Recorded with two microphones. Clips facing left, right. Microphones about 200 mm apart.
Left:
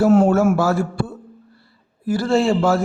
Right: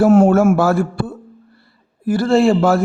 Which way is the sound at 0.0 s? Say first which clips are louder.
Right 3 dB; 50° right (ahead or behind).